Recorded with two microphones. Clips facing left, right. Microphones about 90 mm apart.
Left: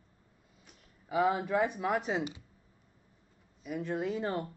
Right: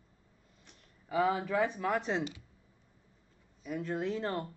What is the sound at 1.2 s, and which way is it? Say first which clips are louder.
Speech: left 1 dB; 20° left (ahead or behind).